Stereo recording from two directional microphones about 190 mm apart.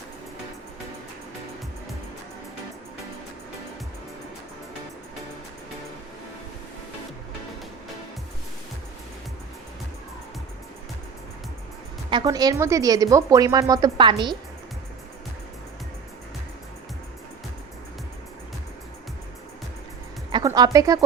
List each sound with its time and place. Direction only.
12.1 s speech: 20° right (ahead or behind)
20.3 s music: 20° right (ahead or behind)